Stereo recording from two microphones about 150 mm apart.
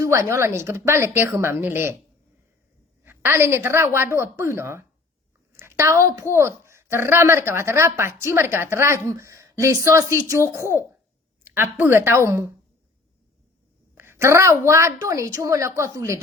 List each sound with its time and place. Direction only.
0.0 s a woman's voice: 20° right (ahead or behind)
3.0 s a woman's voice: 15° right (ahead or behind)
13.9 s a woman's voice: 15° right (ahead or behind)